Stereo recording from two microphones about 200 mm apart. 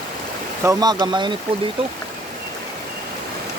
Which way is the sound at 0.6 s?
20° right (ahead or behind).